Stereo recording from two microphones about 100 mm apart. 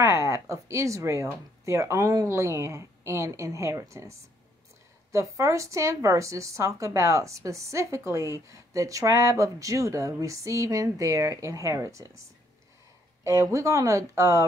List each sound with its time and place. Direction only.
0.0 s a woman's voice: 30° right (ahead or behind)